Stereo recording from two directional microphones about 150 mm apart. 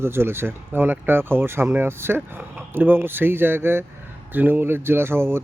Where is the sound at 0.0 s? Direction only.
15° right (ahead or behind).